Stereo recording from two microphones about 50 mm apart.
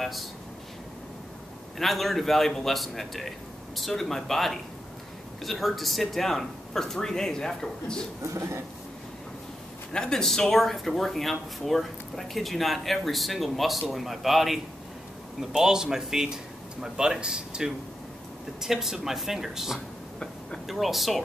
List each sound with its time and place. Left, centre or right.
1.8 s speech: centre
8.2 s speech: right
9.9 s speech: centre